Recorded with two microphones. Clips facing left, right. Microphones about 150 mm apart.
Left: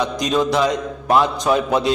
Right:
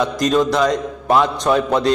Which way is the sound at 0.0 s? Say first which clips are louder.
Right 3 dB; centre (ahead or behind).